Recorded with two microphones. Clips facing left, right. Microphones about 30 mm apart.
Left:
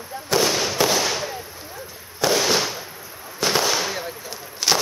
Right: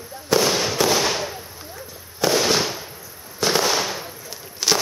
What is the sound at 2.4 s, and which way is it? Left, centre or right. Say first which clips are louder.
Fireworks: right 1 dB; centre.